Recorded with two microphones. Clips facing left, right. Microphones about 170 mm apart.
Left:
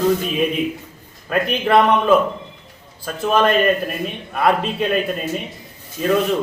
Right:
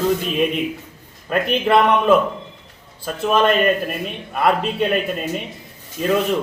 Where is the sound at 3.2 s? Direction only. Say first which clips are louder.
Even; centre (ahead or behind).